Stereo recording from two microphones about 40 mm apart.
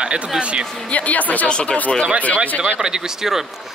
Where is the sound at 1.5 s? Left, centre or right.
Left.